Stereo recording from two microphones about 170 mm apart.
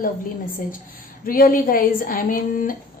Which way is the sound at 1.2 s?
55° left (ahead or behind).